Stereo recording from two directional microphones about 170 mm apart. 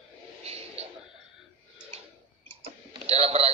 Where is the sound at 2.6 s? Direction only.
35° right (ahead or behind).